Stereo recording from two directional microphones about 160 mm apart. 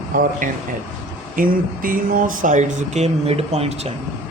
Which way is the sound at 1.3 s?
60° right (ahead or behind).